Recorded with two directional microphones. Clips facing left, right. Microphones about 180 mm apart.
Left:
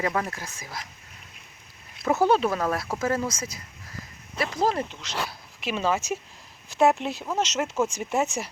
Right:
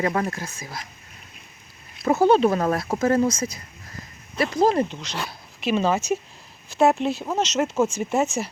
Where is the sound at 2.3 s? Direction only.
25° right (ahead or behind).